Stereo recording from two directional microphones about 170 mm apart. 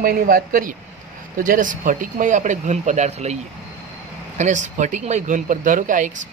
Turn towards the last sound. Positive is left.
turn(degrees=-50)  # may be behind; listen again after turning